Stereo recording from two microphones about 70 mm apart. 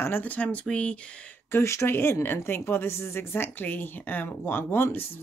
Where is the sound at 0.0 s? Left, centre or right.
Left.